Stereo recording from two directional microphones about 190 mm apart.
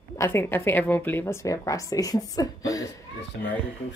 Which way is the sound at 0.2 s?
10° left (ahead or behind).